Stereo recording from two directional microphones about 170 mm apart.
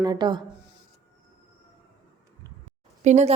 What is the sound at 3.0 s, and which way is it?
Speech, 45° right (ahead or behind).